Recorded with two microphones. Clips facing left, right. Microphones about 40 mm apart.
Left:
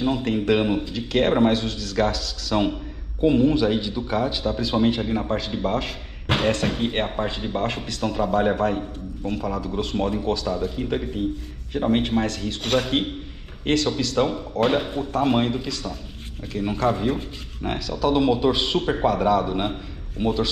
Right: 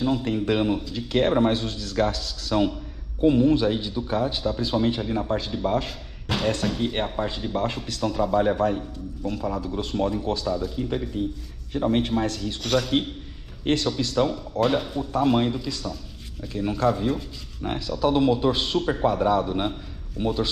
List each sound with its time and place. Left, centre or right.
0.0 s a man's voice: left
3.3 s speech: left
14.1 s a man's voice: left